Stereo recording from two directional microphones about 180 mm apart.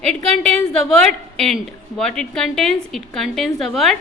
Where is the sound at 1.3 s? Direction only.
Centre (ahead or behind).